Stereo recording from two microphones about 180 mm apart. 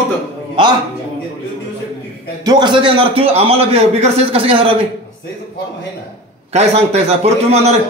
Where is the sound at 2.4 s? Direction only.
25° right (ahead or behind).